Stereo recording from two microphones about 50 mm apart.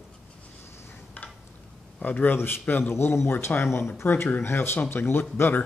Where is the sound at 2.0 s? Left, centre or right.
Left.